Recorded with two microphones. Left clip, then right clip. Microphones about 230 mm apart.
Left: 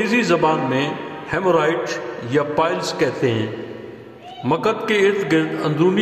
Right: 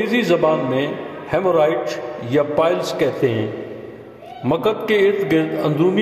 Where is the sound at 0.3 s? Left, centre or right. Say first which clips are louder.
Right 3 dB; left.